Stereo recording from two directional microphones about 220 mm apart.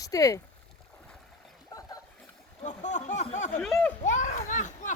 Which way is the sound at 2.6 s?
35° left (ahead or behind).